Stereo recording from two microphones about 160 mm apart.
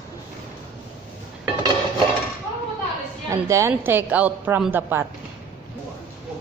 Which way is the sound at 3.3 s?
20° right (ahead or behind).